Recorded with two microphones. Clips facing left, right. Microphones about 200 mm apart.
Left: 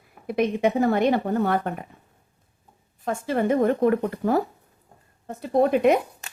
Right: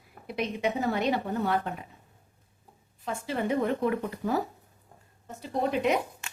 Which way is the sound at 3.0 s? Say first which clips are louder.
Left 7 dB; 50° left (ahead or behind).